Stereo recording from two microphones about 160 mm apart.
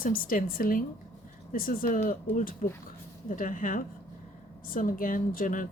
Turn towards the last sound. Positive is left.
turn(degrees=55)  # may be behind; listen again after turning